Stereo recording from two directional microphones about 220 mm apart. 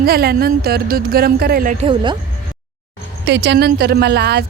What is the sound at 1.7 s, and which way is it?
Speech, 25° right (ahead or behind).